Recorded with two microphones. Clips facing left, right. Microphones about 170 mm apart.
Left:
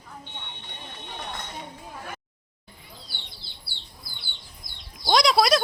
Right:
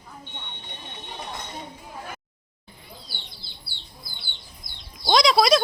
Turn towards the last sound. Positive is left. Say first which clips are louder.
# right 2 dB
turn(degrees=5)  # may be behind; listen again after turning